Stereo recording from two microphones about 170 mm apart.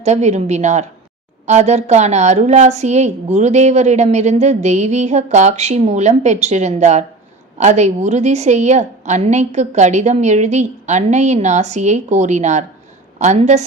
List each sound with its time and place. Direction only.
0.0 s a woman's voice: 40° right (ahead or behind)